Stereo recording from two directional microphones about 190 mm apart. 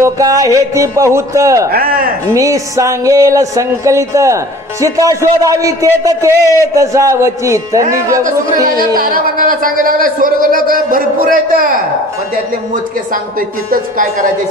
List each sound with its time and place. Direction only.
0.0 s speech: 20° right (ahead or behind)
1.7 s speech: 50° right (ahead or behind)
2.3 s speech: 15° right (ahead or behind)
8.7 s speech: 50° right (ahead or behind)
13.7 s speech: 45° right (ahead or behind)